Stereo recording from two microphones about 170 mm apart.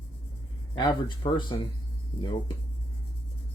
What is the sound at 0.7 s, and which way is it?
Speech, 25° left (ahead or behind).